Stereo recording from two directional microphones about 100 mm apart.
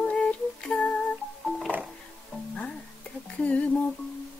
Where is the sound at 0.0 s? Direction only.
10° left (ahead or behind).